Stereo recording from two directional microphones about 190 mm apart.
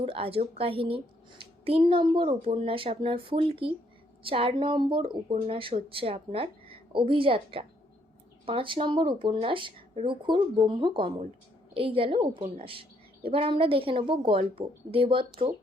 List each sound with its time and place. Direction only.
0.0 s speech: 30° right (ahead or behind)